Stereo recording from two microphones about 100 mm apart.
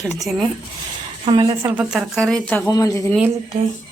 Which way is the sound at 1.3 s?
55° right (ahead or behind).